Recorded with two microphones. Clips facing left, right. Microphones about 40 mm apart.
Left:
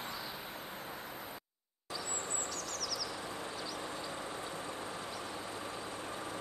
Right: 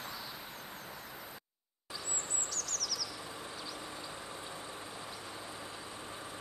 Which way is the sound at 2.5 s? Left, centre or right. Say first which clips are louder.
Left 1 dB; centre.